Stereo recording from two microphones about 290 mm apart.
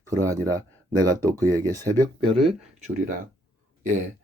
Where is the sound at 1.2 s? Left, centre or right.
Centre.